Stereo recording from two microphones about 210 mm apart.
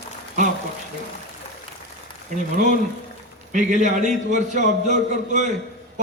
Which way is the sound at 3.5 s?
35° right (ahead or behind).